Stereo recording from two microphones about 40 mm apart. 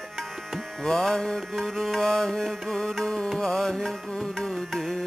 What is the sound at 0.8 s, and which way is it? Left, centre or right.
Music, centre.